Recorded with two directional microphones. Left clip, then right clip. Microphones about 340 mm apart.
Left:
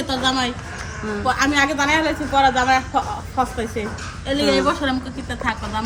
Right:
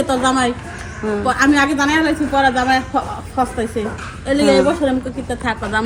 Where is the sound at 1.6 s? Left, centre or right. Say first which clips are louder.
Right 2 dB; centre.